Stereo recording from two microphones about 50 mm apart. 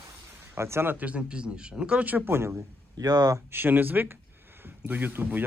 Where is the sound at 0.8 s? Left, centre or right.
Right.